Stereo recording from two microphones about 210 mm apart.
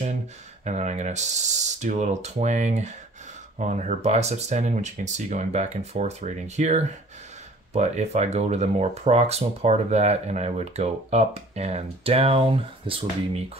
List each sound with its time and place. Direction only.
0.7 s speech: 35° right (ahead or behind)